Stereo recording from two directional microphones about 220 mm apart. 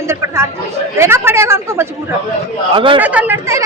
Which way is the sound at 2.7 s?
20° right (ahead or behind).